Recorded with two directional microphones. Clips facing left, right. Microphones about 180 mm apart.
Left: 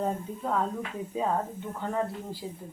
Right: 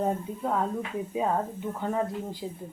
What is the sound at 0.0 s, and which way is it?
Speech, 15° right (ahead or behind).